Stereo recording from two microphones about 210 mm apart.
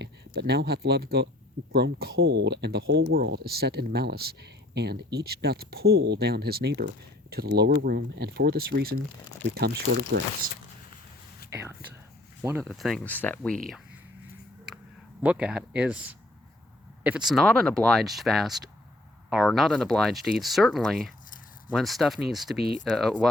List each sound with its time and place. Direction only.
0.0 s speech: 50° right (ahead or behind)
12.4 s speech: 10° right (ahead or behind); by 13.6 s 5° left (ahead or behind)
15.2 s speech: 5° right (ahead or behind)